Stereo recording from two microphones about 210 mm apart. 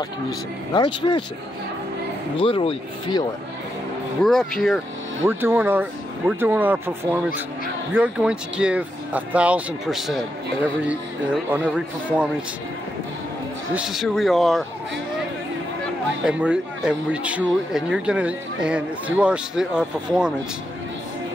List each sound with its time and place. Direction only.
0.7 s speech: 20° left (ahead or behind)
2.3 s speech: 25° left (ahead or behind)
4.2 s speech: centre (ahead or behind)
5.2 s speech: 10° right (ahead or behind)
13.7 s speech: centre (ahead or behind)
16.3 s speech: 5° right (ahead or behind)